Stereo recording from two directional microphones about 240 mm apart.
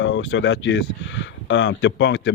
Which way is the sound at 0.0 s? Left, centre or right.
Left.